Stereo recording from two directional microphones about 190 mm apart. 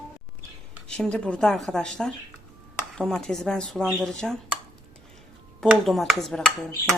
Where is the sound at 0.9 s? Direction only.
5° left (ahead or behind).